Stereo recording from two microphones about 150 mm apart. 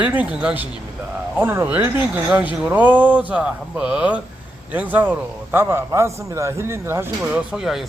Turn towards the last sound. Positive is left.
turn(degrees=0)  # may be behind; listen again after turning